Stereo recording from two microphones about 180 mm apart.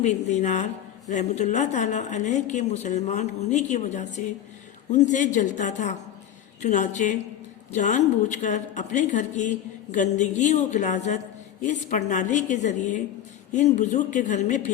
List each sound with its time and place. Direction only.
0.0 s a woman's voice: 40° left (ahead or behind)